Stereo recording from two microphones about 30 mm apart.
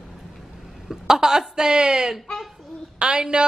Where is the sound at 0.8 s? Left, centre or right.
Centre.